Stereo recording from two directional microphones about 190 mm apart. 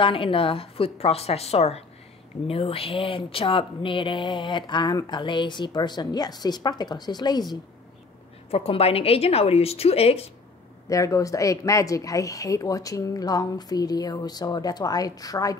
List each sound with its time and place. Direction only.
0.0 s a woman's voice: 30° left (ahead or behind)
8.5 s a woman's voice: 30° left (ahead or behind)
10.9 s speech: 15° left (ahead or behind)